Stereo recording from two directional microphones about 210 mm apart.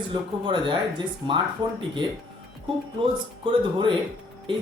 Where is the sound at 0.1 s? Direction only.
20° right (ahead or behind).